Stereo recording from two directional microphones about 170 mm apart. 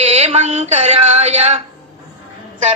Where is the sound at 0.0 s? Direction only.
35° right (ahead or behind).